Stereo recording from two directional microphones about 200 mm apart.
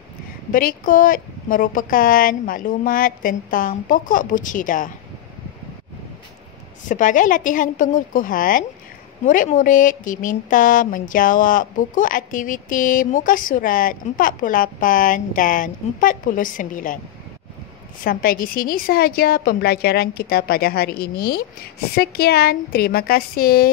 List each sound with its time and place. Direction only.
0.5 s speech: 45° left (ahead or behind)
6.8 s a woman's voice: 40° left (ahead or behind)
18.0 s speech: 45° left (ahead or behind)